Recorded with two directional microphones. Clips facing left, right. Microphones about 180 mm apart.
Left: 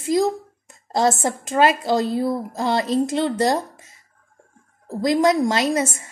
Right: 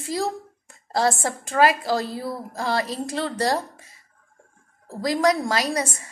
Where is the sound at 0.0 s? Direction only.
20° left (ahead or behind).